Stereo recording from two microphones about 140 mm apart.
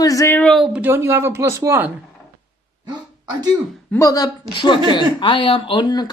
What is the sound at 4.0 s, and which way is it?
A woman's voice, 25° left (ahead or behind).